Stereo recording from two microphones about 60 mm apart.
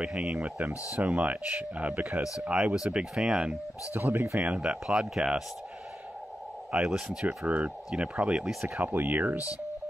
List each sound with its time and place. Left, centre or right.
0.0 s speech: centre
0.9 s speech: right
2.5 s speech: centre
3.9 s speech: right
4.4 s speech: centre
6.7 s speech: centre
7.2 s speech: right
8.8 s speech: right